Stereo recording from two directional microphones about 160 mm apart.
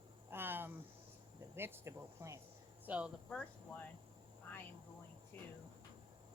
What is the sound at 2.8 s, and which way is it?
Speech, 10° right (ahead or behind).